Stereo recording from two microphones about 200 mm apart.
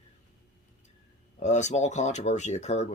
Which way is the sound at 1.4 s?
35° left (ahead or behind).